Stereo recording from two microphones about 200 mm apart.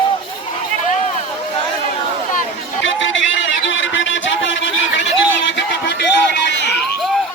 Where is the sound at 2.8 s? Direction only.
70° left (ahead or behind).